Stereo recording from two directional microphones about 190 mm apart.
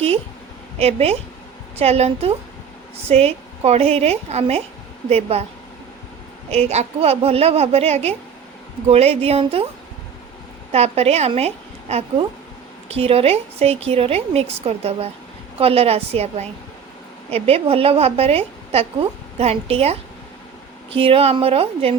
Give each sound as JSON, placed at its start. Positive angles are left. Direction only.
{"t": 0.8, "sound": "a woman's voice", "side_deg": -35}
{"t": 6.5, "sound": "a woman's voice", "side_deg": -35}
{"t": 10.7, "sound": "a woman's voice", "side_deg": -35}